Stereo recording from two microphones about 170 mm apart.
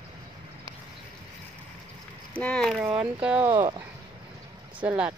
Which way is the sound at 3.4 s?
25° right (ahead or behind).